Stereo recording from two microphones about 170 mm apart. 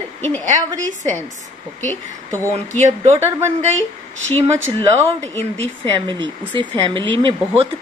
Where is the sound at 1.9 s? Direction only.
10° left (ahead or behind).